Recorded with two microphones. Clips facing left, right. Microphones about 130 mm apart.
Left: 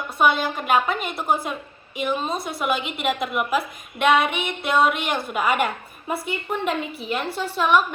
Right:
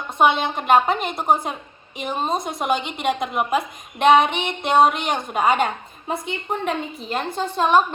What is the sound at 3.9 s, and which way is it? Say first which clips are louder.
Speech: right 4 dB; 45° right (ahead or behind).